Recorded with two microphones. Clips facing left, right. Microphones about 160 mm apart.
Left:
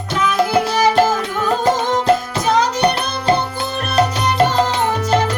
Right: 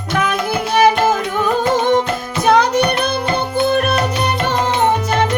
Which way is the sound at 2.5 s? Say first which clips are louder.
Right 4 dB; 60° right (ahead or behind).